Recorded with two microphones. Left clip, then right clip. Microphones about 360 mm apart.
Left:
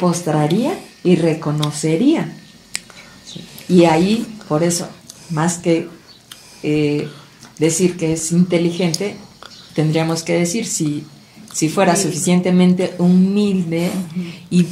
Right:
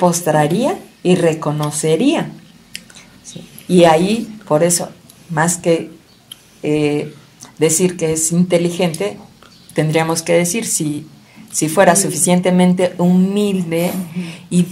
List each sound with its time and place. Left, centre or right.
0.1 s speech: right
3.7 s speech: right